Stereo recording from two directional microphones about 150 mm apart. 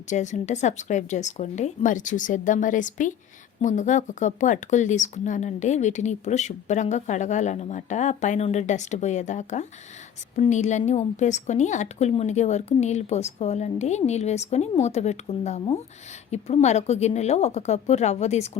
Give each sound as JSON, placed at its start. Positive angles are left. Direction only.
{"t": 0.1, "sound": "a woman's voice", "side_deg": 55}